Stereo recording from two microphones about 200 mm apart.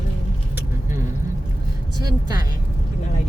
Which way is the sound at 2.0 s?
20° right (ahead or behind).